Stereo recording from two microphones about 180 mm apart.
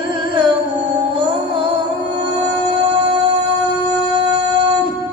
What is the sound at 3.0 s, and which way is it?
Music, 25° right (ahead or behind).